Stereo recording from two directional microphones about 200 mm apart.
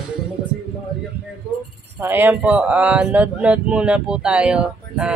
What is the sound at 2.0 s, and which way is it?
Speech, 10° right (ahead or behind).